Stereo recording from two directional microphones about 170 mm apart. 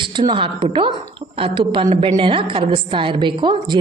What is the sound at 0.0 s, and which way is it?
A woman's voice, 30° right (ahead or behind).